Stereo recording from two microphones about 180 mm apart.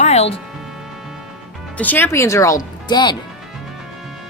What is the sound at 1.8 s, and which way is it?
Speech, 10° left (ahead or behind).